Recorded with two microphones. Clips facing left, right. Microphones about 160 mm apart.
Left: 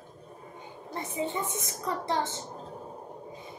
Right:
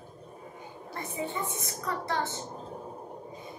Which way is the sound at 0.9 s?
20° left (ahead or behind).